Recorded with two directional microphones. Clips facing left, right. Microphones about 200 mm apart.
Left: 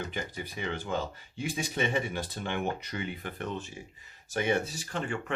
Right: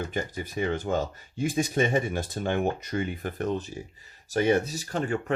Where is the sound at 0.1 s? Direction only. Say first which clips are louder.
Right 6 dB; 45° right (ahead or behind).